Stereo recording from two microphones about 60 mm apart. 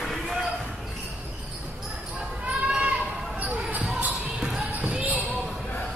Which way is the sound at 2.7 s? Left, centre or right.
Centre.